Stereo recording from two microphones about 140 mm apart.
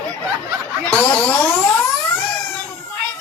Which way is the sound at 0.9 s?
20° left (ahead or behind).